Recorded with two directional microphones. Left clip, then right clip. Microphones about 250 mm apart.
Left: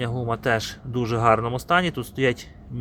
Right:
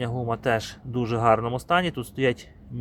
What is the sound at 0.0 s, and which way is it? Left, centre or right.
Speech, centre.